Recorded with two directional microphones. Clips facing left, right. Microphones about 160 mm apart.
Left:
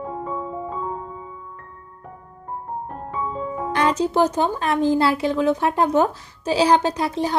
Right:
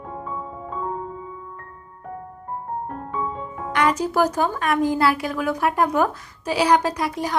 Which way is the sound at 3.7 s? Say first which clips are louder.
Left 1 dB; 25° left (ahead or behind).